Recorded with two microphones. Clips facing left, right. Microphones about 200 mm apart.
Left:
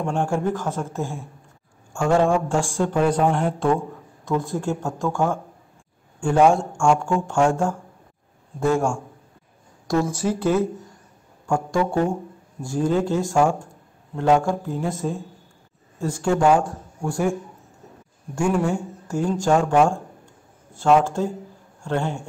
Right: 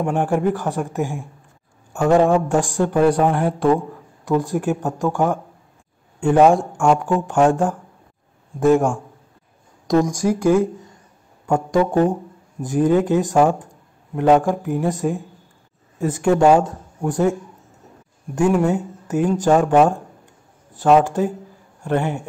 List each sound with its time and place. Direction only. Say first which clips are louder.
0.0 s a man's voice: right 4 dB; 15° right (ahead or behind)
8.5 s a man's voice: right 5 dB; 15° right (ahead or behind)
18.7 s a man's voice: right 4 dB; 20° right (ahead or behind)